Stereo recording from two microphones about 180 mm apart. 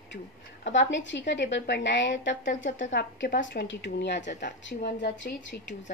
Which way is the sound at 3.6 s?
85° left.